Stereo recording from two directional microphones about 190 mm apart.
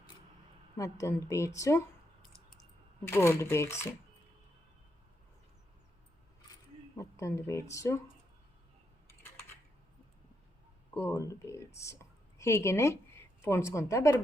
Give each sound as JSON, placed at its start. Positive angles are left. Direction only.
{"t": 0.8, "sound": "speech", "side_deg": 15}
{"t": 3.0, "sound": "speech", "side_deg": 15}
{"t": 6.9, "sound": "speech", "side_deg": 15}
{"t": 10.9, "sound": "a woman's voice", "side_deg": 15}